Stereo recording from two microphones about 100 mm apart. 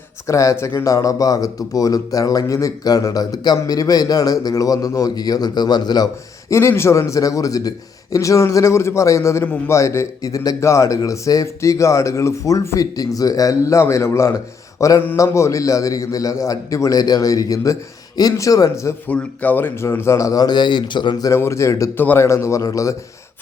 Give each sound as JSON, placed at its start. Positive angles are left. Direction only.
{"t": 0.3, "sound": "speech", "side_deg": 30}
{"t": 6.5, "sound": "speech", "side_deg": 25}
{"t": 19.0, "sound": "speech", "side_deg": 15}
{"t": 21.2, "sound": "a man's voice", "side_deg": 25}
{"t": 21.9, "sound": "a man's voice", "side_deg": 20}